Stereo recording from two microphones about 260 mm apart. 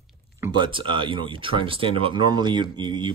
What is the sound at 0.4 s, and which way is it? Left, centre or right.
Speech, centre.